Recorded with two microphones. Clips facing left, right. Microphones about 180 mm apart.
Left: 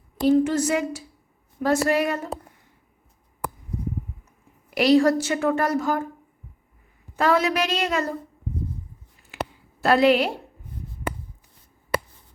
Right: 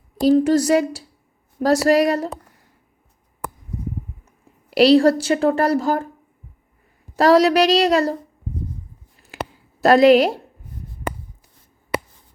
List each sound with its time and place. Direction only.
0.2 s a woman's voice: 35° right (ahead or behind)
4.8 s a woman's voice: 35° right (ahead or behind)
7.2 s a woman's voice: 35° right (ahead or behind)
9.8 s a woman's voice: 40° right (ahead or behind)